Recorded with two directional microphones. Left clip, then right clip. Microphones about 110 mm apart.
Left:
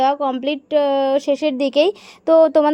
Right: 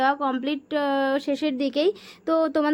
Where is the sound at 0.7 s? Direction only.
25° left (ahead or behind).